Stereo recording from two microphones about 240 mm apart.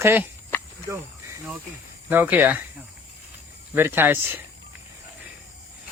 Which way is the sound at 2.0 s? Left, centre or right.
Centre.